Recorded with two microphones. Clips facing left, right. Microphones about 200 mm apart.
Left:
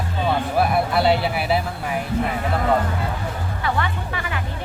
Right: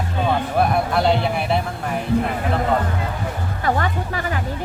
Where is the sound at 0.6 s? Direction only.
5° left (ahead or behind).